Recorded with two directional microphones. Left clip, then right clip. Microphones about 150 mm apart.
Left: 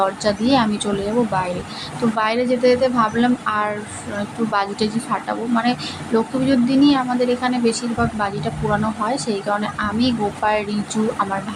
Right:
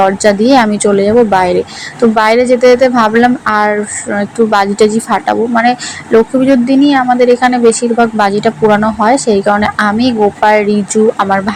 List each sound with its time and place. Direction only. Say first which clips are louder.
0.0 s speech: right 11 dB; 40° right (ahead or behind)